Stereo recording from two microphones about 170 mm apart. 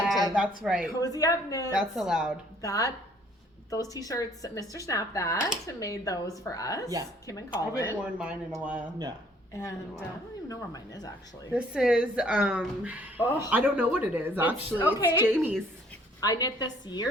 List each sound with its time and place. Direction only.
0.3 s a woman's voice: 5° right (ahead or behind)
0.9 s speech: 20° left (ahead or behind)
1.8 s a woman's voice: 5° right (ahead or behind)
2.6 s speech: 20° left (ahead or behind)
8.0 s a woman's voice: 5° right (ahead or behind)
9.5 s a woman's voice: 15° left (ahead or behind)
11.5 s a woman's voice: 5° right (ahead or behind)
16.2 s speech: 20° left (ahead or behind)